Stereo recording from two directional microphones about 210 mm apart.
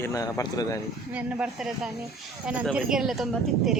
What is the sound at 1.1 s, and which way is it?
Speech, 5° right (ahead or behind).